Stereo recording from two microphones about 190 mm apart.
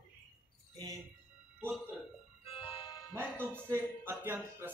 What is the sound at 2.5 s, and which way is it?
Music, 25° left (ahead or behind).